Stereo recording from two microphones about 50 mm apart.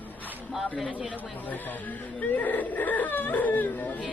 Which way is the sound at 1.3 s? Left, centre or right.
Left.